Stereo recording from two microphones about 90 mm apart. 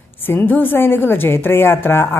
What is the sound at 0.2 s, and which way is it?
A woman's voice, 20° left (ahead or behind).